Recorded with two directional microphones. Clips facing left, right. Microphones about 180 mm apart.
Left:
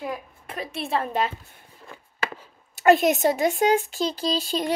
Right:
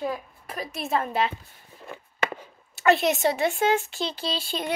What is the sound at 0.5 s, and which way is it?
Speech, 30° left (ahead or behind).